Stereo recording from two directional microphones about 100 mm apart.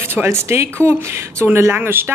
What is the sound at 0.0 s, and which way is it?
Speech, 25° right (ahead or behind).